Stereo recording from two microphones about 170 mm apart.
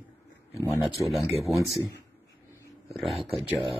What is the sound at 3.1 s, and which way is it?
Speech, 35° right (ahead or behind).